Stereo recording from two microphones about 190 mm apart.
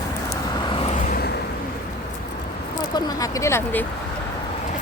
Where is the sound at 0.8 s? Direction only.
35° left (ahead or behind).